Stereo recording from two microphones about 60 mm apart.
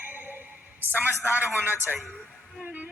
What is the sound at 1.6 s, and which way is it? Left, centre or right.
Speech, left.